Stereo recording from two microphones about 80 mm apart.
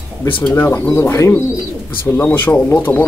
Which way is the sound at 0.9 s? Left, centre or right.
Left.